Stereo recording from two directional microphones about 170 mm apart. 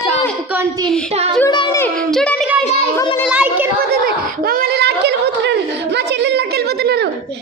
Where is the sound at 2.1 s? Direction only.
5° left (ahead or behind).